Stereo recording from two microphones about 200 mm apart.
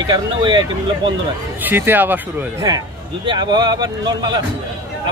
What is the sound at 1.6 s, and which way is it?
Speech, 10° right (ahead or behind).